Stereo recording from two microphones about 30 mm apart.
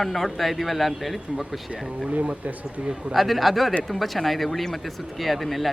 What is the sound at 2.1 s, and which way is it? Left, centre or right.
Speech, right.